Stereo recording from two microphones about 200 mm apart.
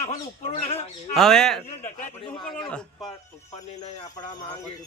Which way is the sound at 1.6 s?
35° left (ahead or behind).